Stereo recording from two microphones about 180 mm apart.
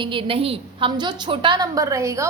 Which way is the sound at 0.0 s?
30° right (ahead or behind).